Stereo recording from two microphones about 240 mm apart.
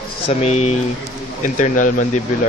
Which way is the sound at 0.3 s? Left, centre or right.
Left.